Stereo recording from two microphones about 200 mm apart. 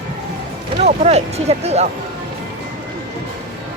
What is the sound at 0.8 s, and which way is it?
Speech, 35° right (ahead or behind).